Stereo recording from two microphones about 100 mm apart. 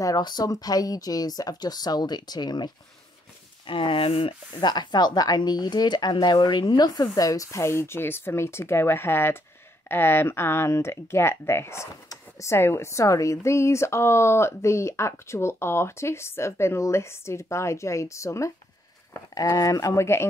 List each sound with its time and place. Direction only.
0.0 s speech: 40° left (ahead or behind)
3.6 s speech: 60° left (ahead or behind)
4.6 s speech: 45° left (ahead or behind); by 20.2 s 25° left (ahead or behind)